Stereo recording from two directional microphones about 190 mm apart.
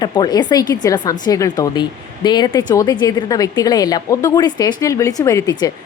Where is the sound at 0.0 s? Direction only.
20° left (ahead or behind).